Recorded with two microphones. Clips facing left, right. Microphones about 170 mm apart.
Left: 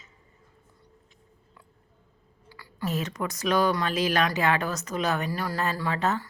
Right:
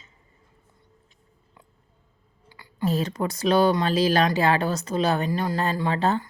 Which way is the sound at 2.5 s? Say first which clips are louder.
Right 6 dB; 25° right (ahead or behind).